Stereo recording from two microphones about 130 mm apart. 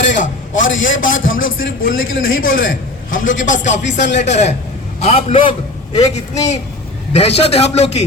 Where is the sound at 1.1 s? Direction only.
90° left; by 4.5 s 60° left (ahead or behind).